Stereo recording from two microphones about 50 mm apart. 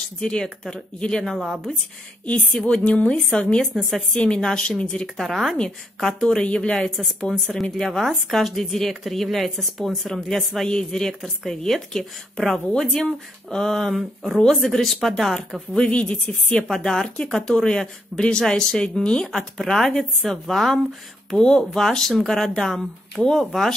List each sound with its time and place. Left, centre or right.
0.2 s speech: centre
1.4 s speech: centre
2.6 s a woman's voice: left
5.0 s a woman's voice: centre
7.7 s a woman's voice: centre
15.7 s speech: centre
19.2 s a woman's voice: centre
21.3 s a woman's voice: centre